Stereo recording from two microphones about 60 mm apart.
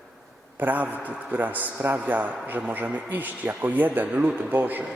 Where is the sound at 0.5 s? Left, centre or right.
Right.